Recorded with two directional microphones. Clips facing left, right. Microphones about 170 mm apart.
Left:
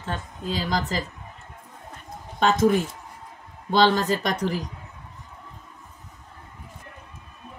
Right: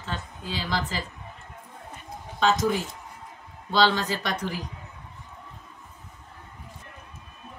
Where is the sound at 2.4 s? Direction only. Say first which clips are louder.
Left 3 dB; 55° left (ahead or behind).